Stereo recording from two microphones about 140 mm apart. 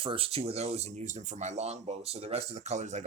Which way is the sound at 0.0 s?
40° right (ahead or behind).